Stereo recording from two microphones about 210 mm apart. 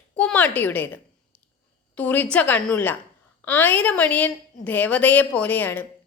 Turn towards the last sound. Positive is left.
turn(degrees=10)  # may be behind; listen again after turning